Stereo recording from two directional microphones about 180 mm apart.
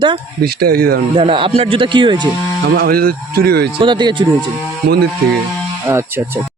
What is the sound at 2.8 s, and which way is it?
Speech, 55° right (ahead or behind).